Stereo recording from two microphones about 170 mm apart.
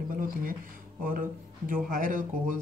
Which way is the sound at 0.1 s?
55° right (ahead or behind).